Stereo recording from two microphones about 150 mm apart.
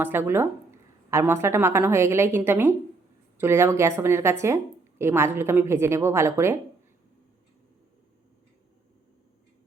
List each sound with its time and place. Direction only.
0.0 s a woman's voice: 15° right (ahead or behind)